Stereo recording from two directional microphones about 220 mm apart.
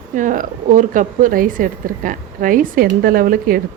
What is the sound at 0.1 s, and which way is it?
A woman's voice, 35° right (ahead or behind).